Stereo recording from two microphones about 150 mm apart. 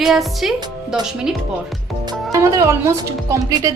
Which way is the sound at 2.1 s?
20° right (ahead or behind).